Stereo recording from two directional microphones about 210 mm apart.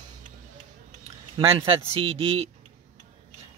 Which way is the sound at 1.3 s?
25° right (ahead or behind).